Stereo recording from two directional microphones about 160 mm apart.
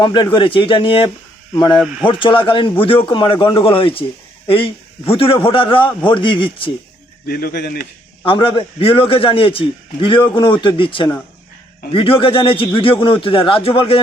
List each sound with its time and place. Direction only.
0.0 s a man's voice: 30° left (ahead or behind)
1.8 s speech: 5° right (ahead or behind)
2.0 s a man's voice: 30° left (ahead or behind)
7.3 s a man's voice: 70° left (ahead or behind)
8.2 s a man's voice: 35° left (ahead or behind)